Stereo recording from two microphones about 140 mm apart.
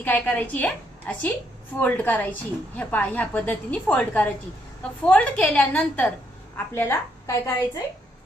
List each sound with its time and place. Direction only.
0.0 s a woman's voice: 10° left (ahead or behind)